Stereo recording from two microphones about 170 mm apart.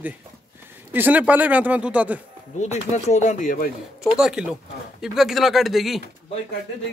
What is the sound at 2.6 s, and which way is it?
Speech, 40° left (ahead or behind).